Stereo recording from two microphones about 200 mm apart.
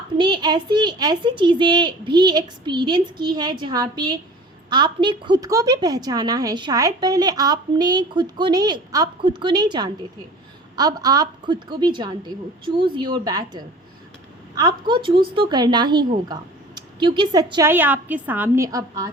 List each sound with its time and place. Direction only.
0.2 s a woman's voice: 20° right (ahead or behind)